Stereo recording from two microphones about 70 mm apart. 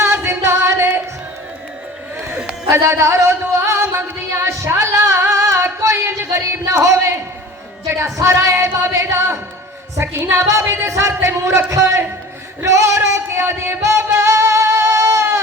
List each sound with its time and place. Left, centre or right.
0.0 s music: right
2.7 s music: right
4.4 s singing: right
6.7 s music: right
10.0 s a woman's voice: right
10.4 s music: right
11.2 s a woman's voice: right
11.7 s music: right